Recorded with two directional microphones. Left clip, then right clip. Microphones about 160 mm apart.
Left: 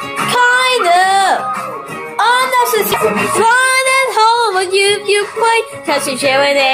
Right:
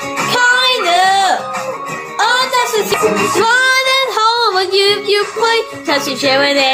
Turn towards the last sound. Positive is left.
turn(degrees=0)  # may be behind; listen again after turning